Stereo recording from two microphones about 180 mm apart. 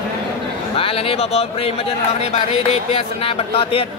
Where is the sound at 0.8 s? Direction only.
30° left (ahead or behind).